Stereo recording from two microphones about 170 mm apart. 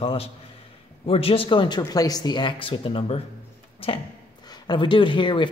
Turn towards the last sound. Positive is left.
turn(degrees=30)  # may be behind; listen again after turning